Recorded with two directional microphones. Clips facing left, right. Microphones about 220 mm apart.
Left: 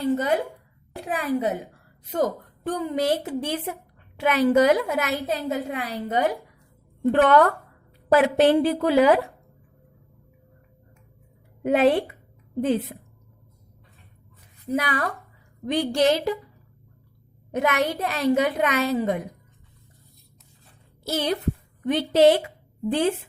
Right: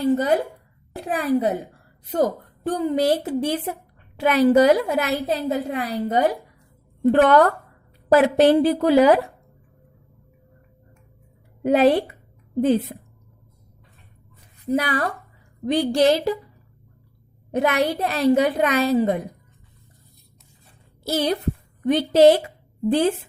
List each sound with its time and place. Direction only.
0.0 s a woman's voice: 35° right (ahead or behind)
11.6 s a woman's voice: 35° right (ahead or behind)
14.8 s a woman's voice: 35° right (ahead or behind)
17.5 s a woman's voice: 35° right (ahead or behind)
21.0 s a woman's voice: 35° right (ahead or behind)